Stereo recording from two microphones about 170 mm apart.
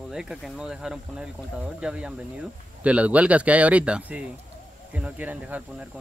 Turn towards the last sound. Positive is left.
turn(degrees=-10)  # may be behind; listen again after turning